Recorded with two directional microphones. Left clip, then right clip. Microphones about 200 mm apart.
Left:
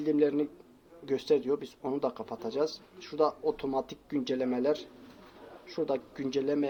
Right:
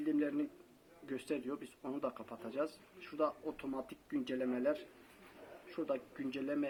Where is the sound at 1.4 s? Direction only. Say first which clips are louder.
Left 12 dB; 30° left (ahead or behind).